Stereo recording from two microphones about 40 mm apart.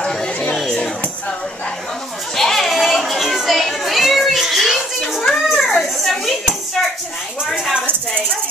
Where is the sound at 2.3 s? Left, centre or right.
Centre.